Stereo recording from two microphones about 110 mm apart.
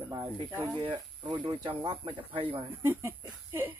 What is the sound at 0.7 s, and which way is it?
Speech, 45° right (ahead or behind).